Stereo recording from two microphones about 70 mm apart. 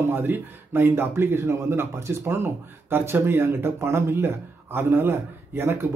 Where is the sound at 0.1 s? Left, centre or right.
Right.